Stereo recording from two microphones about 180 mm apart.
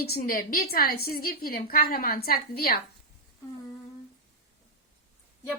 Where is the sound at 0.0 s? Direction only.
55° left (ahead or behind).